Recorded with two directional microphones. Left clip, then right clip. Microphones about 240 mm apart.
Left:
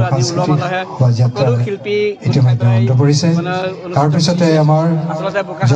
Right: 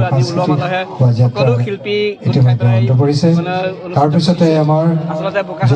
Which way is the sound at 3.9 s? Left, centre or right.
Left.